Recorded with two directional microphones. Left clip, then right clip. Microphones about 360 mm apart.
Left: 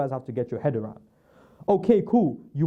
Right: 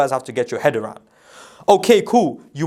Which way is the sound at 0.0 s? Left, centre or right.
Centre.